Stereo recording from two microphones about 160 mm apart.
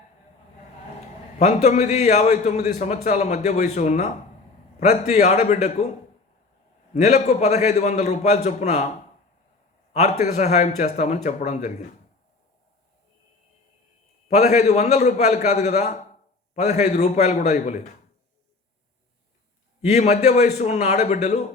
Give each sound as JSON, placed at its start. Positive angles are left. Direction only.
{"t": 1.4, "sound": "a man's voice", "side_deg": 45}
{"t": 6.9, "sound": "a man's voice", "side_deg": 45}
{"t": 9.9, "sound": "a man's voice", "side_deg": 45}
{"t": 14.3, "sound": "a man's voice", "side_deg": 45}
{"t": 19.8, "sound": "a man's voice", "side_deg": 45}